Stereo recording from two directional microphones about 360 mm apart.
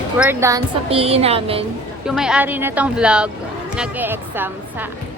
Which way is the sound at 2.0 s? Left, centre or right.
Centre.